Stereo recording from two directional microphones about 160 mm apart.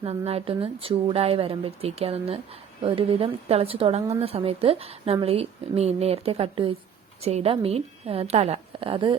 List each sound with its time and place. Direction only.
0.0 s speech: 40° right (ahead or behind)